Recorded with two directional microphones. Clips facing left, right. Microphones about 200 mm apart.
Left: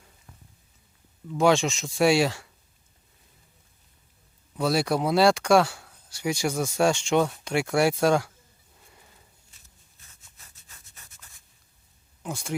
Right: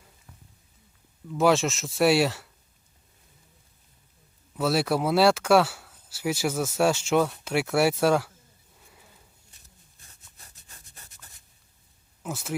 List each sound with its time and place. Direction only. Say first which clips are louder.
1.3 s speech: left 1 dB; centre (ahead or behind)
4.5 s speech: even; 5° right (ahead or behind)
8.9 s sniff: right 1 dB; centre (ahead or behind)
10.1 s rub: right 2 dB; 35° right (ahead or behind)
12.2 s speech: even; 5° right (ahead or behind)